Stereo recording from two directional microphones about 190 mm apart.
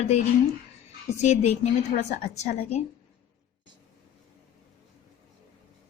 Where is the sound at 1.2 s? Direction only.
35° left (ahead or behind).